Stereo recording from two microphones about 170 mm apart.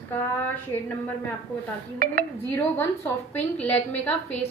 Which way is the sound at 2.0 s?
55° right (ahead or behind).